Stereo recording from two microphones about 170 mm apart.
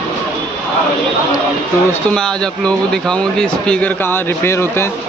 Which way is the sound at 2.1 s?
5° left (ahead or behind).